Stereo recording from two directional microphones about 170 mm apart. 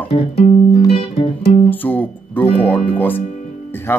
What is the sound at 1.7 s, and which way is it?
Speech, 10° left (ahead or behind).